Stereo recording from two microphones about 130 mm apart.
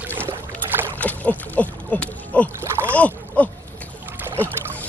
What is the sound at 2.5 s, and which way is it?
Rowboat, 20° right (ahead or behind).